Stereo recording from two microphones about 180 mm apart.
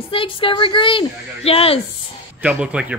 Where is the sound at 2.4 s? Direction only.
5° right (ahead or behind).